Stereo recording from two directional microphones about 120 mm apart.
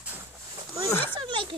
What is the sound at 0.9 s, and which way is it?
Speech, 15° left (ahead or behind).